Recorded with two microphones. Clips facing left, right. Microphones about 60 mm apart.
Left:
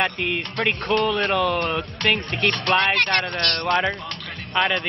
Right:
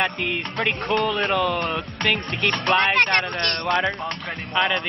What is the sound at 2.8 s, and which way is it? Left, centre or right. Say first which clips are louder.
Speech: right 1 dB; right.